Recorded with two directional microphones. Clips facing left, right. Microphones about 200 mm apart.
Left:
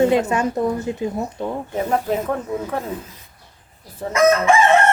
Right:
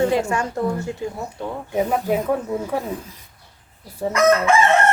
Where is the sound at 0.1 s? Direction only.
20° left (ahead or behind).